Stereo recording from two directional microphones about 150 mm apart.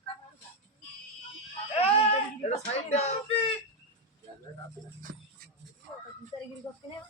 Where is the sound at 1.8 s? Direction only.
45° left (ahead or behind).